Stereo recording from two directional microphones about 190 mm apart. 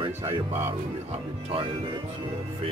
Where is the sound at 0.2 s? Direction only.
15° right (ahead or behind).